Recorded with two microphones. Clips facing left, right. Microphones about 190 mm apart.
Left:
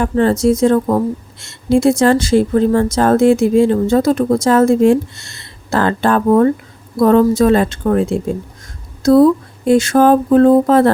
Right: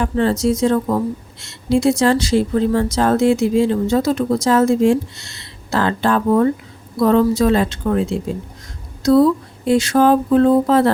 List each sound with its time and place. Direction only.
0.0 s speech: 50° left (ahead or behind)